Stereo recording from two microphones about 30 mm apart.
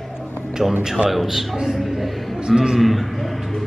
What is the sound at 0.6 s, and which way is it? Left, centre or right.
A man's voice, centre.